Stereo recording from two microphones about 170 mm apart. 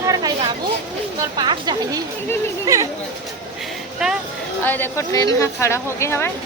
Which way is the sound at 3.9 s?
5° right (ahead or behind).